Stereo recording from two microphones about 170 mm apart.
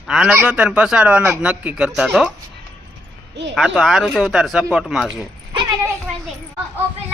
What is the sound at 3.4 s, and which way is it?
Speech, 90° right.